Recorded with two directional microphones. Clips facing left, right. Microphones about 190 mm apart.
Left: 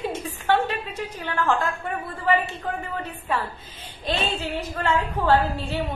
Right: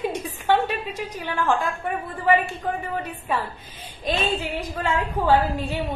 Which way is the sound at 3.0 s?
10° right (ahead or behind).